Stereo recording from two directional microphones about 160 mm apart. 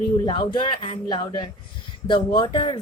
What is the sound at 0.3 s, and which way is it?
A man's voice, 30° left (ahead or behind).